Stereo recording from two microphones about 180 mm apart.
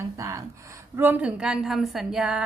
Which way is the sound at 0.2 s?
15° right (ahead or behind).